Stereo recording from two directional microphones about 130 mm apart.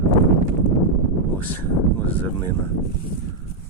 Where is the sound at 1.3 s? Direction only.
15° left (ahead or behind).